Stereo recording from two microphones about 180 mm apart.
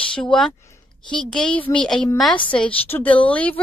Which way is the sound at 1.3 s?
5° left (ahead or behind).